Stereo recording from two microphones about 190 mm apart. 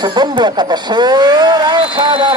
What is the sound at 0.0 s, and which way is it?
Speech, 20° right (ahead or behind).